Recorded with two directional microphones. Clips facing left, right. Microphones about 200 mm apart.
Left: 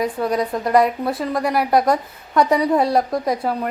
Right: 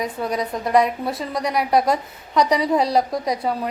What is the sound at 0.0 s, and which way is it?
A woman's voice, centre (ahead or behind).